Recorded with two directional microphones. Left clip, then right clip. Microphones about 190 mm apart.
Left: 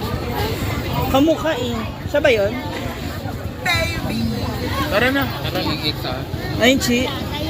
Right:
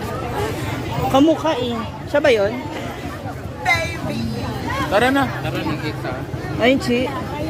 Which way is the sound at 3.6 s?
55° right (ahead or behind).